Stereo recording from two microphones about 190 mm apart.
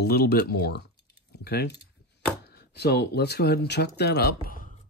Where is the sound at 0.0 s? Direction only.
55° left (ahead or behind).